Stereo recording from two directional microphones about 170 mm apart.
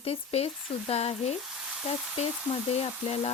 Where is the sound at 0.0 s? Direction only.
35° left (ahead or behind).